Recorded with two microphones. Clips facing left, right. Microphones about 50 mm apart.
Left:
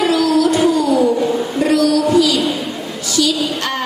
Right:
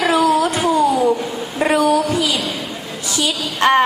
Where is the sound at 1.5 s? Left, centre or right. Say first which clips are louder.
Right 1 dB; right.